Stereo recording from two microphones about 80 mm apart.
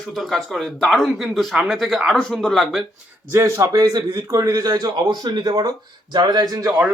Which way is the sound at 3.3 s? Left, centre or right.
Right.